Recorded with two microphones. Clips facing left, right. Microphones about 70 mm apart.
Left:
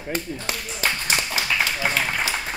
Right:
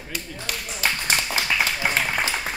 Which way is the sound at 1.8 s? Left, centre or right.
Centre.